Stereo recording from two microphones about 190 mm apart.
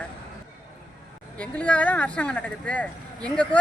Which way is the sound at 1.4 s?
5° left (ahead or behind).